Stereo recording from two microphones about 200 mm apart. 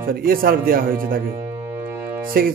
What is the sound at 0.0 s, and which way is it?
Speech, 45° right (ahead or behind).